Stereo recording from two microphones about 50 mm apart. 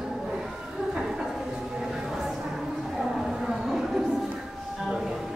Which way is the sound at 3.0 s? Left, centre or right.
Centre.